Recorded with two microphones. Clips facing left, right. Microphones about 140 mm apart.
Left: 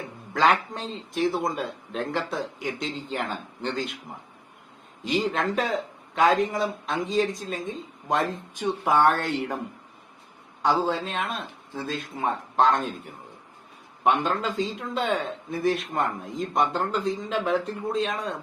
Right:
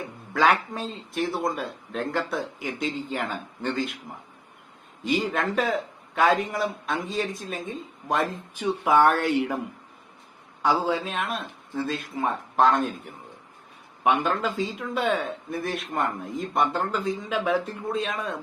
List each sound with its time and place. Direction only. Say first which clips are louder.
0.3 s a man's voice: even; 5° right (ahead or behind)
5.0 s a man's voice: even; 5° right (ahead or behind)
10.7 s a man's voice: even; 10° right (ahead or behind)
14.0 s a man's voice: even; 10° right (ahead or behind)